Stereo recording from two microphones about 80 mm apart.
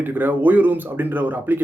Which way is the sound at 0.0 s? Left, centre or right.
Right.